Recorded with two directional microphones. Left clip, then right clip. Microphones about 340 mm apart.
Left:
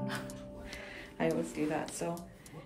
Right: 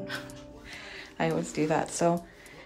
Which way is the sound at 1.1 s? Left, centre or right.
Centre.